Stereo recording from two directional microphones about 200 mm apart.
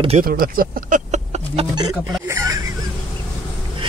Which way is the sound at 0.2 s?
45° right (ahead or behind).